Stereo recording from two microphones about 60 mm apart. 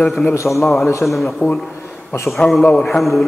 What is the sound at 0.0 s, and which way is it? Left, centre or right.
A man's voice, centre.